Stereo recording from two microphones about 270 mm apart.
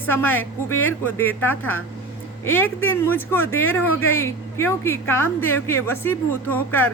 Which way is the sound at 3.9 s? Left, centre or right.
Left.